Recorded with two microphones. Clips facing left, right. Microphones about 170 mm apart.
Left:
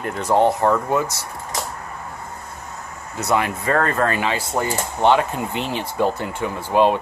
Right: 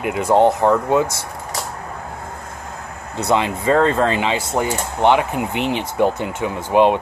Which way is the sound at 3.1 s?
20° right (ahead or behind).